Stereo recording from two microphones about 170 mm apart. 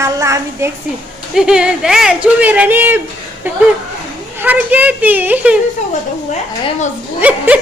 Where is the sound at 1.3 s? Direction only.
5° right (ahead or behind).